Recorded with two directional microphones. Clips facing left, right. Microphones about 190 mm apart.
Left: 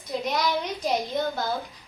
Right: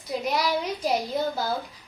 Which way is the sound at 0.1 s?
5° right (ahead or behind).